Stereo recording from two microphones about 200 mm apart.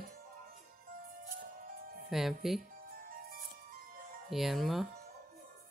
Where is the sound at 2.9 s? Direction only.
45° right (ahead or behind).